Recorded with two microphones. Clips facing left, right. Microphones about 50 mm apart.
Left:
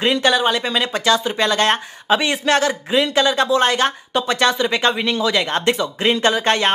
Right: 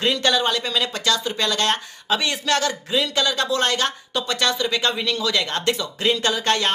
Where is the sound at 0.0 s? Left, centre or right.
Centre.